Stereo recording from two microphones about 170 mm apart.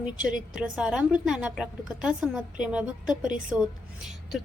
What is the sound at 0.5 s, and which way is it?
A woman's voice, 5° right (ahead or behind).